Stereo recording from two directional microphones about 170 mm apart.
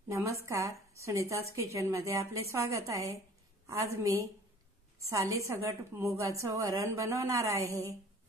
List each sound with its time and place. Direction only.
0.1 s a woman's voice: 15° right (ahead or behind)